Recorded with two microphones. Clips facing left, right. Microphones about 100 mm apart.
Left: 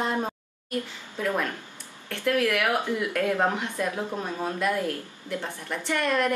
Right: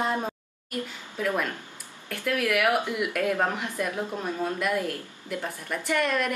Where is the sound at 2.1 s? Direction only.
5° right (ahead or behind).